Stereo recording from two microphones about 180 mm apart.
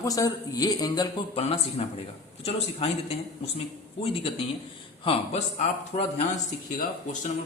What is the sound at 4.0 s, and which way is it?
A man's voice, 30° left (ahead or behind).